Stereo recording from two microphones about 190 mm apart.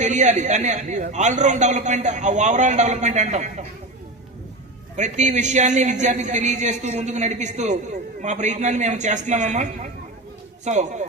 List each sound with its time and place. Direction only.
0.0 s a man's voice: 40° right (ahead or behind)
4.9 s a man's voice: 40° right (ahead or behind)